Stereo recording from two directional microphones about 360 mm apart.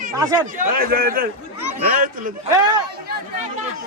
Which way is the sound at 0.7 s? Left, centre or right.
Right.